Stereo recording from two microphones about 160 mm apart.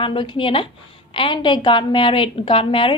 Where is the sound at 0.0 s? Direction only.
30° left (ahead or behind).